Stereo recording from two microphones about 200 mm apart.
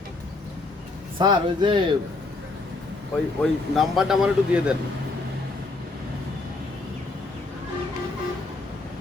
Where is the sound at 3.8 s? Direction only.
5° right (ahead or behind).